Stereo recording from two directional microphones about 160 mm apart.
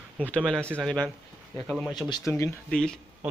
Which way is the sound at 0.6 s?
15° right (ahead or behind).